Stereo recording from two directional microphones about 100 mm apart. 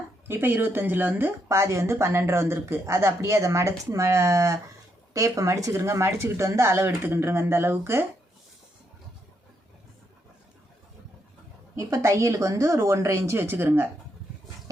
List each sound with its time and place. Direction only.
0.3 s speech: 20° right (ahead or behind)
1.5 s speech: 30° right (ahead or behind)
11.8 s speech: 30° right (ahead or behind)